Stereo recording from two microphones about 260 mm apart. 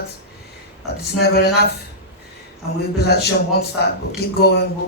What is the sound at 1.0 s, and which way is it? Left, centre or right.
Speech, left.